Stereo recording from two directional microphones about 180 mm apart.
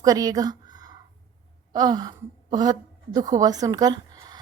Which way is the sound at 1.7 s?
20° right (ahead or behind).